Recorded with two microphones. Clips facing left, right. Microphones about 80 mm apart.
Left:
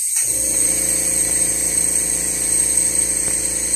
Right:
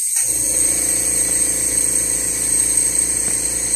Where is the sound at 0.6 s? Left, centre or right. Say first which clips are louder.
Right 1 dB; right.